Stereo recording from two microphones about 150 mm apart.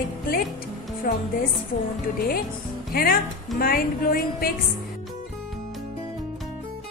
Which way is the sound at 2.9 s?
80° left.